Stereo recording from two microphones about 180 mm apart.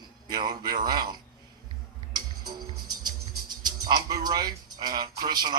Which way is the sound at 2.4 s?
25° right (ahead or behind).